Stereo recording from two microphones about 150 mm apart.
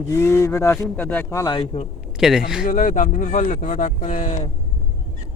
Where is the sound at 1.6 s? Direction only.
45° left (ahead or behind).